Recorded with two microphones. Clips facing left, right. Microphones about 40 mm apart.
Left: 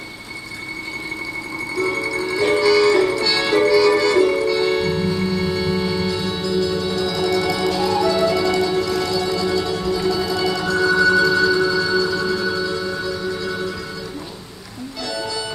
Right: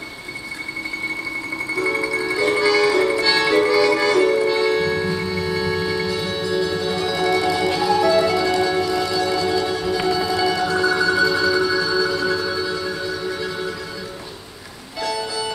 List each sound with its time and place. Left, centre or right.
1.8 s music: centre
5.5 s music: centre